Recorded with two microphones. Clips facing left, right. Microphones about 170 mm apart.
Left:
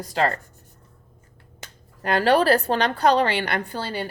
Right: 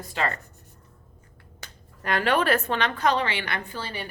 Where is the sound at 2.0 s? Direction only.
35° left (ahead or behind).